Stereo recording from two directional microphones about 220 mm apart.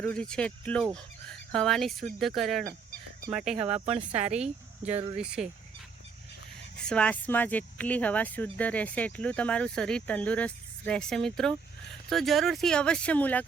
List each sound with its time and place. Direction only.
0.0 s speech: 5° left (ahead or behind)
3.8 s speech: 30° right (ahead or behind)
4.3 s speech: 5° right (ahead or behind)
4.9 s speech: 25° right (ahead or behind)
5.1 s speech: 5° right (ahead or behind)
6.8 s speech: 5° left (ahead or behind)